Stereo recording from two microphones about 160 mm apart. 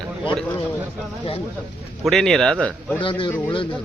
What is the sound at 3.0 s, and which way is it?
Speech, 30° left (ahead or behind).